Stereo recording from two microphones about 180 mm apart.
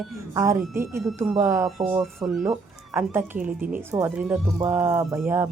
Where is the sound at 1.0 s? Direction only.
Centre (ahead or behind).